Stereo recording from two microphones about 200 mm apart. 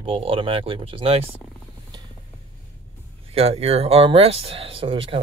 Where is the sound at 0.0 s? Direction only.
25° right (ahead or behind).